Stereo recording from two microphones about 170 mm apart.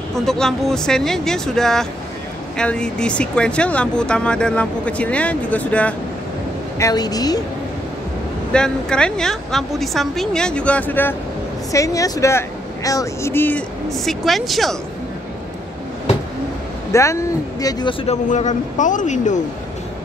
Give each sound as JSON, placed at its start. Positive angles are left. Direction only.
{"t": 0.1, "sound": "a woman's voice", "side_deg": 0}
{"t": 6.8, "sound": "speech", "side_deg": 20}
{"t": 8.5, "sound": "a woman's voice", "side_deg": 5}
{"t": 16.9, "sound": "speech", "side_deg": 15}
{"t": 18.0, "sound": "speech", "side_deg": 45}